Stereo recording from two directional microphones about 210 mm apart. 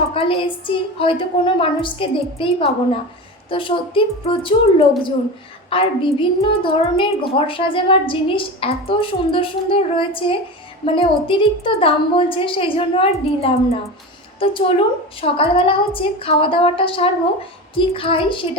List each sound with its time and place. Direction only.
0.1 s a woman's voice: 25° left (ahead or behind)